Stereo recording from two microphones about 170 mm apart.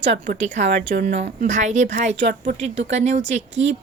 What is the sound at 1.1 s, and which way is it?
Speech, 45° right (ahead or behind).